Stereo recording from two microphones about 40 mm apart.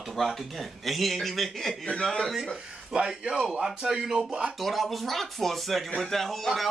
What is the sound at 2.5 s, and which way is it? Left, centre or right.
Speech, centre.